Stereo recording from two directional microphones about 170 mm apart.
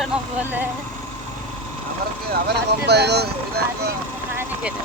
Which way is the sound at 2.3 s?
75° right (ahead or behind).